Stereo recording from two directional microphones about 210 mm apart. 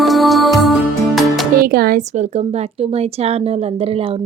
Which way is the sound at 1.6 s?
45° right (ahead or behind).